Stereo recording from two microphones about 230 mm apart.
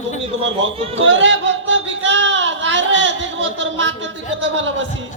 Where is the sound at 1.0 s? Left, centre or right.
Right.